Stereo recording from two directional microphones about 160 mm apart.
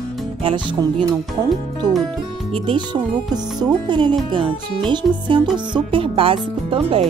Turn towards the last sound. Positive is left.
turn(degrees=-35)  # may be behind; listen again after turning